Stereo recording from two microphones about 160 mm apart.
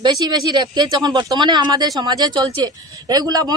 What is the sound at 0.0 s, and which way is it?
Speech, 25° right (ahead or behind).